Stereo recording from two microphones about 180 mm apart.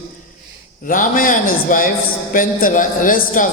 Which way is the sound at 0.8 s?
50° left (ahead or behind).